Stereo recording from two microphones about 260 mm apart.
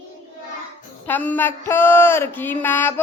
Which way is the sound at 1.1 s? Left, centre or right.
Centre.